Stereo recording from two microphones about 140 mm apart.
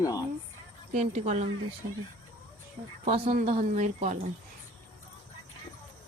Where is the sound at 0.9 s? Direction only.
55° right (ahead or behind).